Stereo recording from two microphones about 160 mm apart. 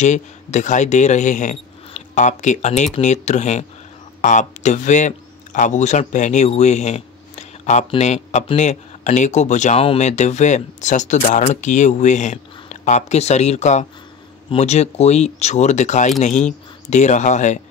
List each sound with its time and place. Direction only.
0.0 s speech: 45° left (ahead or behind)